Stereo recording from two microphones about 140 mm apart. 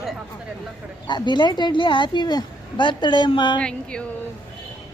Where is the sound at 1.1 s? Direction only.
30° left (ahead or behind).